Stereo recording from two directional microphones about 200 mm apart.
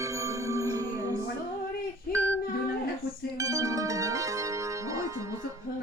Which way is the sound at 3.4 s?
15° right (ahead or behind).